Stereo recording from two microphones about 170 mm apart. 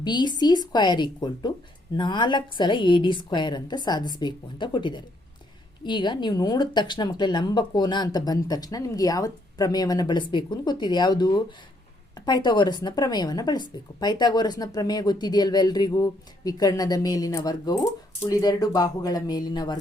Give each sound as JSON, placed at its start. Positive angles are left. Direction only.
{"t": 0.0, "sound": "a woman's voice", "side_deg": 25}